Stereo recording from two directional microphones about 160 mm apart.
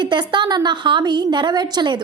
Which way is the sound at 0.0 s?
30° right (ahead or behind).